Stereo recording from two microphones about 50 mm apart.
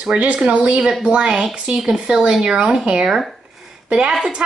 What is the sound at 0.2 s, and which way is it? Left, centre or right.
A woman's voice, right.